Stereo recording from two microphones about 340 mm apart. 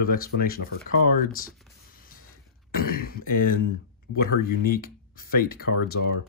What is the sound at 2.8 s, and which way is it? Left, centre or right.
Speech, left.